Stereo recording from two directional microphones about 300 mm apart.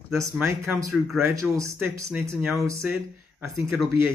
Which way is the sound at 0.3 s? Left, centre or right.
Centre.